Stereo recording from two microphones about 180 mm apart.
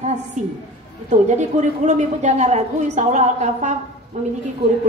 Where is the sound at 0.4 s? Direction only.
40° right (ahead or behind).